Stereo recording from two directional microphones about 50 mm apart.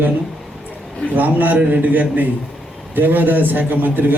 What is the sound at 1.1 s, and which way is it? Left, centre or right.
A man's voice, right.